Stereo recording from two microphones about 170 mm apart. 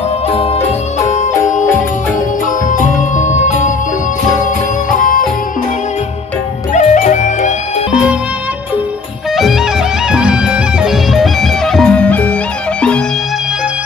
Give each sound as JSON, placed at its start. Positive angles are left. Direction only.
{"t": 0.3, "sound": "music", "side_deg": 35}
{"t": 2.7, "sound": "music", "side_deg": 45}
{"t": 4.9, "sound": "music", "side_deg": 55}
{"t": 6.7, "sound": "music", "side_deg": 45}
{"t": 9.4, "sound": "music", "side_deg": 0}